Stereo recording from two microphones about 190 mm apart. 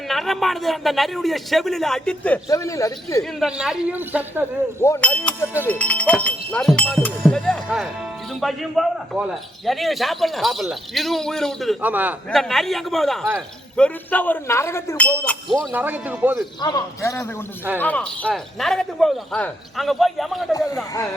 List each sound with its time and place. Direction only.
0.1 s a man's voice: centre (ahead or behind); by 3.2 s 15° left (ahead or behind)
3.4 s a man's voice: 5° right (ahead or behind)
4.8 s a man's voice: 10° left (ahead or behind)
11.8 s a man's voice: 10° right (ahead or behind)
15.7 s a man's voice: 10° right (ahead or behind)
16.6 s a man's voice: 20° left (ahead or behind); by 20.4 s centre (ahead or behind)